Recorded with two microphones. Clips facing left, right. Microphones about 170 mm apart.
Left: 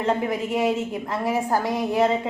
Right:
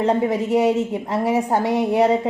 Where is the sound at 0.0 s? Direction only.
35° right (ahead or behind).